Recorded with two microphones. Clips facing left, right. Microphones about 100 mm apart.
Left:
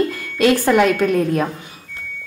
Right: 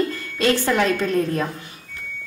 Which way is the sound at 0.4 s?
10° left (ahead or behind).